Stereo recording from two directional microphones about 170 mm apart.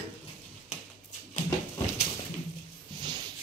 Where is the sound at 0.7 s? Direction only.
45° left (ahead or behind).